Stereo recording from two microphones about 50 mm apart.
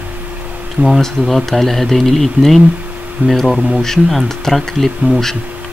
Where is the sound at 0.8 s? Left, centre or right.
Centre.